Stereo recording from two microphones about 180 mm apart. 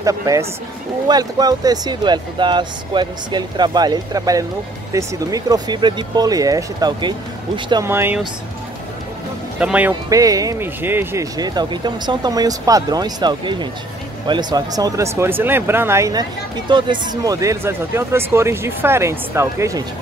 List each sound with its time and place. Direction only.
0.0 s speech: 20° right (ahead or behind)
7.9 s speech: 10° right (ahead or behind)
9.6 s speech: 5° right (ahead or behind)
10.0 s speech: 20° right (ahead or behind)